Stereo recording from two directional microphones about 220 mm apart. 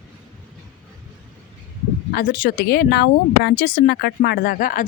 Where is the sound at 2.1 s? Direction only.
40° left (ahead or behind).